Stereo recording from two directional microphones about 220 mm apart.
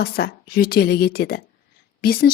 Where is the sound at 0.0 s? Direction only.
45° left (ahead or behind).